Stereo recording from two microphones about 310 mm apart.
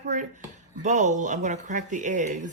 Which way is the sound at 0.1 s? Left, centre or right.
Right.